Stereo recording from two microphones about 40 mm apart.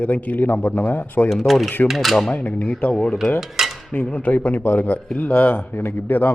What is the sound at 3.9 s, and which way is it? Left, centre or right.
A man's voice, left.